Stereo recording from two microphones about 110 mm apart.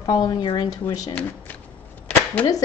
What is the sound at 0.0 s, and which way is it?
A woman's voice, 35° left (ahead or behind).